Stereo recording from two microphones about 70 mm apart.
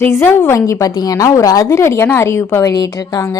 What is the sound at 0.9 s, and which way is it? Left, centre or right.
A woman's voice, left.